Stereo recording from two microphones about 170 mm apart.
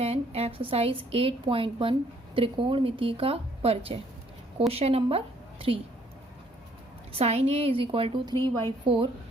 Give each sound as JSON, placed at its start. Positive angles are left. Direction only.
{"t": 0.0, "sound": "a woman's voice", "side_deg": -35}
{"t": 7.1, "sound": "a woman's voice", "side_deg": -35}